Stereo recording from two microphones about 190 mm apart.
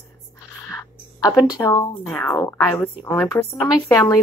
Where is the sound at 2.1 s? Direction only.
5° left (ahead or behind).